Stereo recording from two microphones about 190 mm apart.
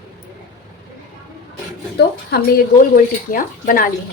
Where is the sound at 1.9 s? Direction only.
55° left (ahead or behind).